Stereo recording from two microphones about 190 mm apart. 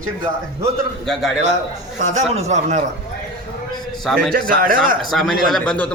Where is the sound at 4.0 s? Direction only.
Centre (ahead or behind).